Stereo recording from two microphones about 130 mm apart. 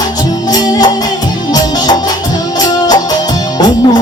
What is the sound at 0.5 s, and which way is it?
Music, 30° left (ahead or behind).